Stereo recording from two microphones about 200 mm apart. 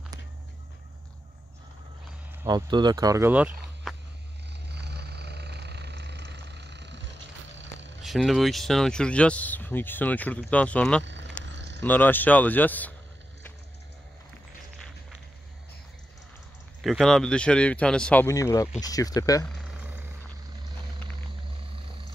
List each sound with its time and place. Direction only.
2.4 s speech: 20° right (ahead or behind)
4.6 s vehicle: 55° right (ahead or behind)
8.0 s speech: centre (ahead or behind)
11.1 s vehicle: 65° right (ahead or behind)
11.4 s a sound: 60° right (ahead or behind)
11.8 s speech: 10° left (ahead or behind)
16.8 s speech: centre (ahead or behind); by 19.4 s 15° left (ahead or behind)
19.6 s vehicle: 5° right (ahead or behind)